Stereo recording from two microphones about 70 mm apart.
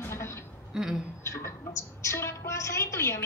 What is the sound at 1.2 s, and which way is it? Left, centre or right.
A woman's voice, left.